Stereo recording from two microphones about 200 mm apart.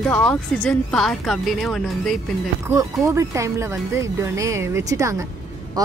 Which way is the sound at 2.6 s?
15° right (ahead or behind).